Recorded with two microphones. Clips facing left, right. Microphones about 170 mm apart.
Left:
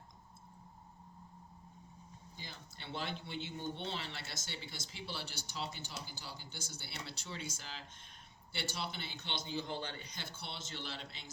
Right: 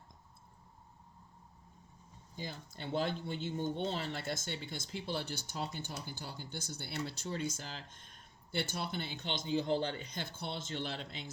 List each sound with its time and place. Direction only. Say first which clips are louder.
2.3 s speech: right 10 dB; 45° right (ahead or behind)